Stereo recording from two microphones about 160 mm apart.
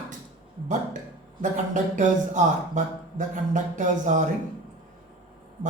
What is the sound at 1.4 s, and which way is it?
Speech, 50° right (ahead or behind).